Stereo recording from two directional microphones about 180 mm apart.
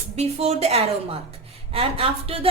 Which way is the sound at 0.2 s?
35° right (ahead or behind).